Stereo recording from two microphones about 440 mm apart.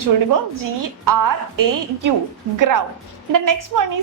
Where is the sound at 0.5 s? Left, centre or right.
Right.